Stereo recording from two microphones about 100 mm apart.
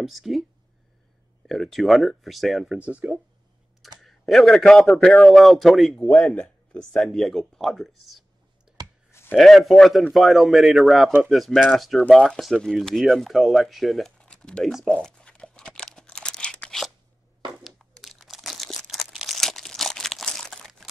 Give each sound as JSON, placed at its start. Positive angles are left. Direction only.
{"t": 0.0, "sound": "a man's voice", "side_deg": 0}
{"t": 1.5, "sound": "a man's voice", "side_deg": 0}
{"t": 4.0, "sound": "a man's voice", "side_deg": 5}
{"t": 8.8, "sound": "clicking", "side_deg": -45}
{"t": 9.3, "sound": "a man's voice", "side_deg": 0}
{"t": 14.9, "sound": "crunch", "side_deg": 5}
{"t": 17.6, "sound": "crumpling", "side_deg": 0}